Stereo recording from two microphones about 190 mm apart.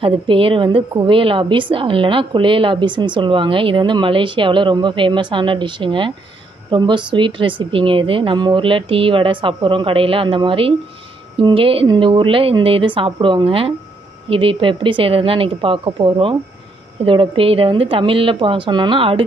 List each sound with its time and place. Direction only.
0.0 s a woman's voice: 25° right (ahead or behind)